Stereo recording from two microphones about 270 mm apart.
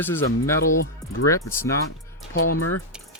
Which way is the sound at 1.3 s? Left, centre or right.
Centre.